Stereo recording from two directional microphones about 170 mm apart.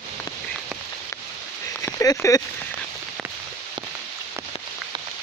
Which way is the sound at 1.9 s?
15° left (ahead or behind).